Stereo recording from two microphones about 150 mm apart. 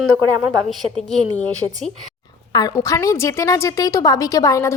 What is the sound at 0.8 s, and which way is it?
Speech, 5° left (ahead or behind).